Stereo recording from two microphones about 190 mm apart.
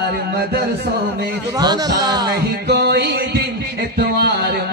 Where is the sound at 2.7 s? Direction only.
60° right (ahead or behind).